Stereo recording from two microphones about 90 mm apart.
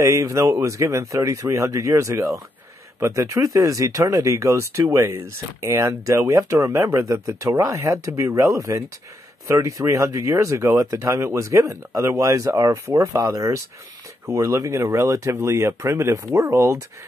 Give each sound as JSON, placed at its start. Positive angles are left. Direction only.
{"t": 0.0, "sound": "speech", "side_deg": -35}